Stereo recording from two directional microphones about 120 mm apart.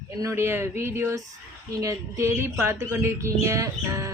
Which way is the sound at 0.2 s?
20° right (ahead or behind).